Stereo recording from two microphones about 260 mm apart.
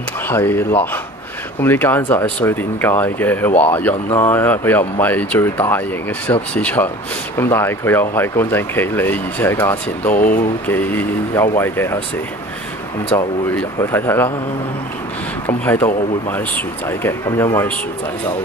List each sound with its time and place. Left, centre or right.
0.3 s speech: centre
10.1 s speech: left
10.7 s speech: centre
13.1 s speech: centre
15.4 s speech: centre